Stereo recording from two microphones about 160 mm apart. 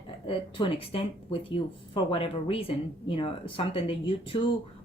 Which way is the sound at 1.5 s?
35° left (ahead or behind).